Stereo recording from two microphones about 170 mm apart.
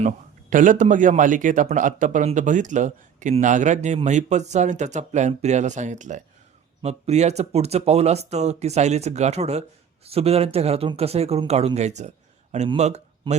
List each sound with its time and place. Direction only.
0.5 s a man's voice: 50° right (ahead or behind)